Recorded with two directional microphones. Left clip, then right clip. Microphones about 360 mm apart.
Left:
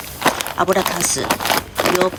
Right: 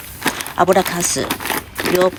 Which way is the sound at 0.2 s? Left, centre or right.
Left.